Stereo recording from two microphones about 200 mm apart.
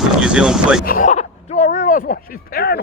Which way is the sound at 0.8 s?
45° left (ahead or behind).